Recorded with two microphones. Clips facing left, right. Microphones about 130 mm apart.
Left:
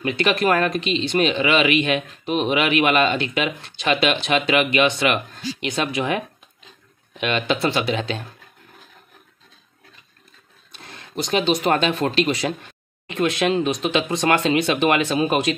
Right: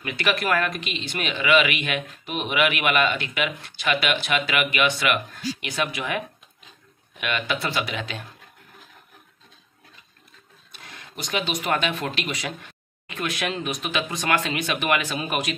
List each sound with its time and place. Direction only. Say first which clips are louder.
0.0 s speech: left 6 dB; 25° left (ahead or behind)
10.7 s speech: left 6 dB; 30° left (ahead or behind)